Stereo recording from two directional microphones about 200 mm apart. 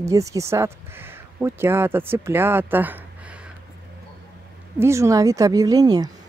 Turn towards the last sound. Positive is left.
turn(degrees=-20)  # may be behind; listen again after turning